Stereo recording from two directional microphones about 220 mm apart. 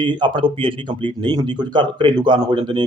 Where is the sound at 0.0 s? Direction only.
20° right (ahead or behind).